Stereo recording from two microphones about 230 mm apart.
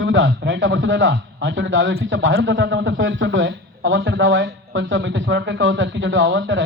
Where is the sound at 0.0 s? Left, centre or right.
Right.